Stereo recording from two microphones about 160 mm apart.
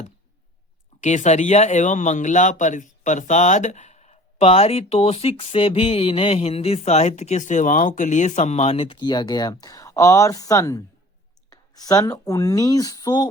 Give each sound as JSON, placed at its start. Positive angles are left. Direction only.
{"t": 1.0, "sound": "speech", "side_deg": 45}